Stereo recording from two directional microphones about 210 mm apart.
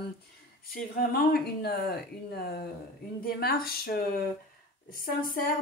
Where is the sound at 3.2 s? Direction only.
45° left (ahead or behind).